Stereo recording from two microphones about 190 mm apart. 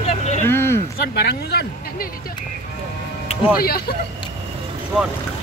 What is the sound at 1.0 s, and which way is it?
Speech, 60° left (ahead or behind).